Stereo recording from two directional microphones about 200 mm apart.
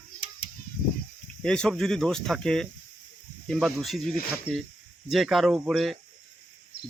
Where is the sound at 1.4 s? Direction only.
5° left (ahead or behind).